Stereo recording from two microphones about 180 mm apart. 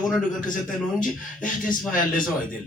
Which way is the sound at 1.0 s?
50° left (ahead or behind).